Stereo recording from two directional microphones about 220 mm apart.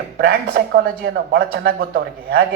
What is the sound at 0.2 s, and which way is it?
Speech, 45° right (ahead or behind).